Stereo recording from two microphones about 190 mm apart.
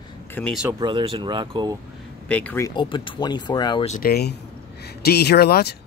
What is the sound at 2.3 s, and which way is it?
Speech, 10° left (ahead or behind).